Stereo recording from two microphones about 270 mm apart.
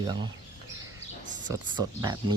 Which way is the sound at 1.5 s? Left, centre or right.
Centre.